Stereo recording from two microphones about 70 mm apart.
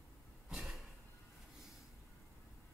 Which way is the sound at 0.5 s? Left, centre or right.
Centre.